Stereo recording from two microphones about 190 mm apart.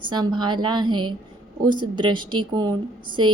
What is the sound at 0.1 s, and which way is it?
Speech, 25° right (ahead or behind).